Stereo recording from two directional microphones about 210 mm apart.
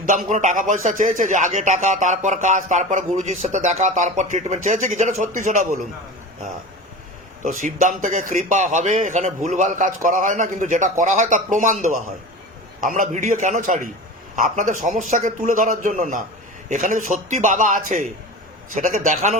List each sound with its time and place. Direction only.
0.1 s speech: 35° right (ahead or behind)
7.4 s speech: 35° right (ahead or behind)